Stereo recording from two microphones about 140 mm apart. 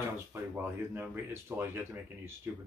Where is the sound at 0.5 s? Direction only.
15° right (ahead or behind).